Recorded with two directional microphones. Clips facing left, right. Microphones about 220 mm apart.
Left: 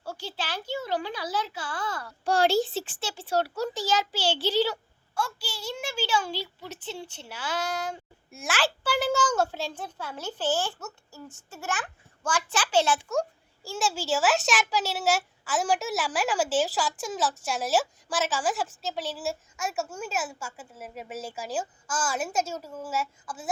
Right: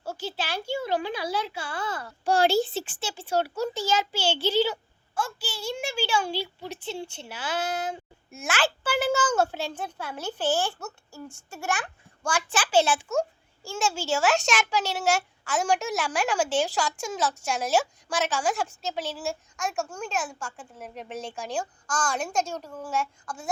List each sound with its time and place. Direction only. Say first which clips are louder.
0.0 s a sound: right 3 dB; 25° right (ahead or behind)
0.3 s a child's voice: right 3 dB; 10° right (ahead or behind)
0.9 s a child's voice: even; 25° right (ahead or behind)
2.5 s a child's voice: right 1 dB; centre (ahead or behind); by 7.9 s 20° right (ahead or behind)
8.3 s a child's voice: right 1 dB; centre (ahead or behind)